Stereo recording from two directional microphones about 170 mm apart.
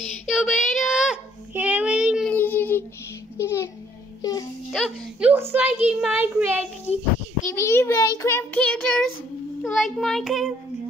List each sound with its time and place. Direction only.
0.3 s child singing: centre (ahead or behind)
2.2 s child singing: 10° left (ahead or behind)
3.3 s music: 15° left (ahead or behind)
4.2 s child singing: 20° left (ahead or behind)
5.5 s child singing: 10° right (ahead or behind)
7.4 s child singing: 15° left (ahead or behind); by 10.5 s centre (ahead or behind)